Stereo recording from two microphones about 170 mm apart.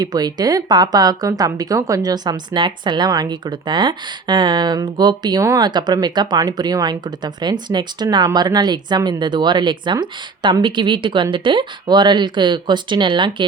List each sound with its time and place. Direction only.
0.0 s a woman's voice: 25° right (ahead or behind)